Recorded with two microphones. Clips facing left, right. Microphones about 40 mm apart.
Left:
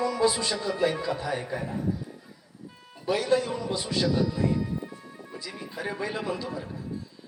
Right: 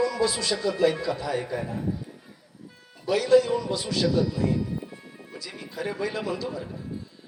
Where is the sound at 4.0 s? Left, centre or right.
Centre.